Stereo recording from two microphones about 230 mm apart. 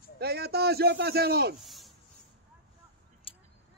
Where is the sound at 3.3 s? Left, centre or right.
Left.